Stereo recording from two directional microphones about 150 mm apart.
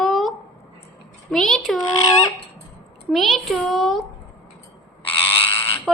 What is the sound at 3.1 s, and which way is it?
Speech, centre (ahead or behind).